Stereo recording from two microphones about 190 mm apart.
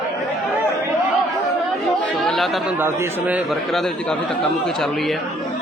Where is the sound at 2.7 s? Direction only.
10° right (ahead or behind).